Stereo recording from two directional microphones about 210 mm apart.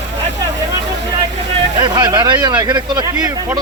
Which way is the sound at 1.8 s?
20° right (ahead or behind).